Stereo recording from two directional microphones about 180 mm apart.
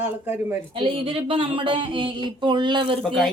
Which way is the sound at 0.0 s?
10° right (ahead or behind).